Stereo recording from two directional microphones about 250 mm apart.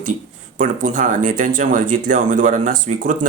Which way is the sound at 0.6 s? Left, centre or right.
Right.